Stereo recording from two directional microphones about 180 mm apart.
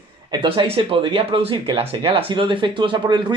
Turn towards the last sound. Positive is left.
turn(degrees=-25)  # may be behind; listen again after turning